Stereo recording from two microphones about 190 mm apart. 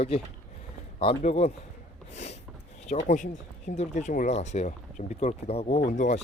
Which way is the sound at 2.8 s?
40° left (ahead or behind).